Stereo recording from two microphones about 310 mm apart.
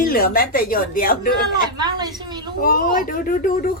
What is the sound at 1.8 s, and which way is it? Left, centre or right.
Speech, centre.